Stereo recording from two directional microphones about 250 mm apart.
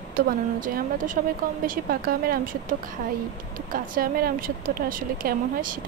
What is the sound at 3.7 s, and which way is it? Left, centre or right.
Speech, right.